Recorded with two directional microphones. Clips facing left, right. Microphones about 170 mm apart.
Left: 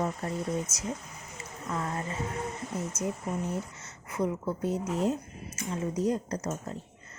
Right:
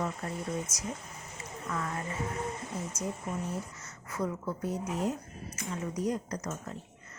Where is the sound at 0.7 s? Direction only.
5° left (ahead or behind).